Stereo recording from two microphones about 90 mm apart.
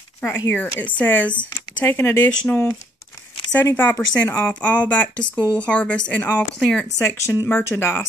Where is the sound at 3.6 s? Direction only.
25° left (ahead or behind).